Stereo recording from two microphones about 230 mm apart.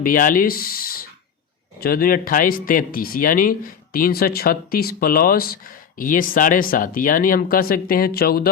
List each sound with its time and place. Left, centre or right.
0.0 s speech: left